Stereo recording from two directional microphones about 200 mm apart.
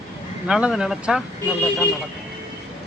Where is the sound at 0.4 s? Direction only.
5° right (ahead or behind).